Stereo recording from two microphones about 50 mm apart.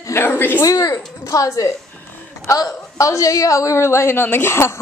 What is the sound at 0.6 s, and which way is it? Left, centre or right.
Speech, left.